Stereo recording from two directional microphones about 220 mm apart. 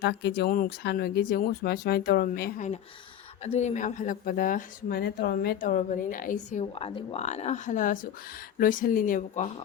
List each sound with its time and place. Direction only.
0.0 s speech: 50° left (ahead or behind)